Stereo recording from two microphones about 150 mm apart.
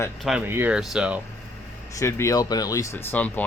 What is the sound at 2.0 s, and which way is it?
Speech, 20° left (ahead or behind).